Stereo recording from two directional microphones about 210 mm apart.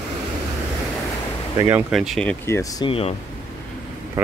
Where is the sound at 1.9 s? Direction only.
Centre (ahead or behind).